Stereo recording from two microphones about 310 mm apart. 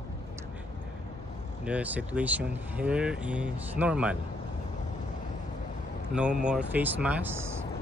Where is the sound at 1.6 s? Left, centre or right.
Centre.